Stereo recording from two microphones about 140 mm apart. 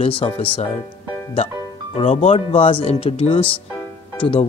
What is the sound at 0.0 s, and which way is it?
Speech, 40° left (ahead or behind).